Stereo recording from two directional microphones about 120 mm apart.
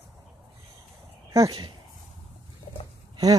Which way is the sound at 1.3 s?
25° right (ahead or behind).